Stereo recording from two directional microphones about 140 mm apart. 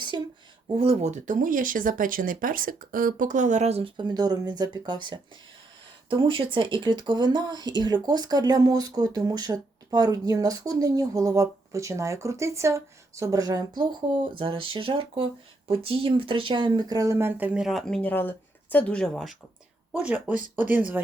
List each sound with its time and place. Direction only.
0.1 s speech: 35° right (ahead or behind)
0.7 s speech: 45° right (ahead or behind); by 19.4 s centre (ahead or behind)
19.9 s speech: 10° right (ahead or behind)